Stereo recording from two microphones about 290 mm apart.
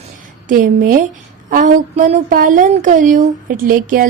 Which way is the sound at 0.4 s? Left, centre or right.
Right.